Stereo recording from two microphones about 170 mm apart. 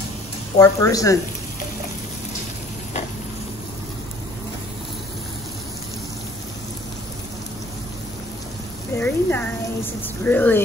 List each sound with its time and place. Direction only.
0.6 s speech: 20° left (ahead or behind)
8.9 s a woman's voice: 10° left (ahead or behind)